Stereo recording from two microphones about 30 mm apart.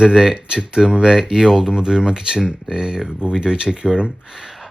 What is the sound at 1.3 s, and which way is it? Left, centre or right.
Speech, centre.